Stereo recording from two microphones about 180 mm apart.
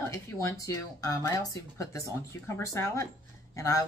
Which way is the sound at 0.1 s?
15° left (ahead or behind).